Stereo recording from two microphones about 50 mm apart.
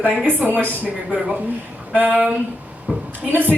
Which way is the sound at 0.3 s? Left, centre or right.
Right.